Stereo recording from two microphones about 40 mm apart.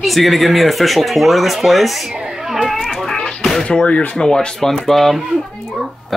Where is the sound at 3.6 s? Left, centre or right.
Left.